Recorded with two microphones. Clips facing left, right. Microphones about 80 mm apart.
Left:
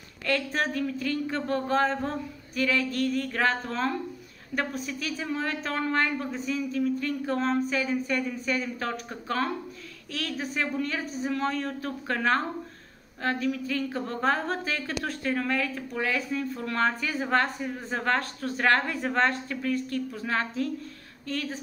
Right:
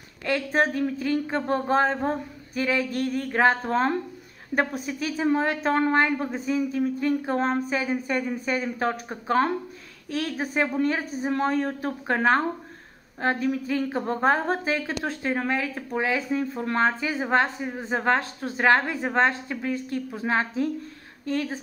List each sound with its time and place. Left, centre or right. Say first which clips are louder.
0.5 s speech: right 5 dB; right
7.3 s speech: right 2 dB; right
10.5 s speech: right 7 dB; right